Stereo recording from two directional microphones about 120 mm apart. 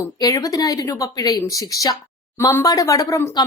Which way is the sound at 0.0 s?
30° left (ahead or behind).